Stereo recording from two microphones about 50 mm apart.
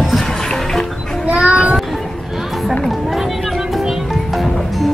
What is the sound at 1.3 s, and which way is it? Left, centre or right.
Child singing, right.